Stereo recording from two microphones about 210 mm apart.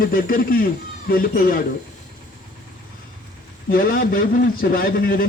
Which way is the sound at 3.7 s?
45° left (ahead or behind).